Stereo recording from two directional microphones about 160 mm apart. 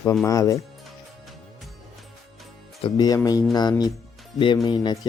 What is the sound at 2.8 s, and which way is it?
Speech, 30° left (ahead or behind).